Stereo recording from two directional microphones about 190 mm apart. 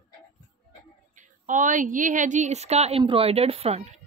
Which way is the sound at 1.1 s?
40° right (ahead or behind).